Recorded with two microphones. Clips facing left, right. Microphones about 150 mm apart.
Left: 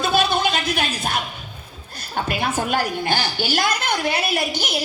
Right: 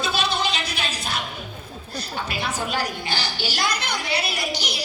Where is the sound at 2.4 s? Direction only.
50° left (ahead or behind).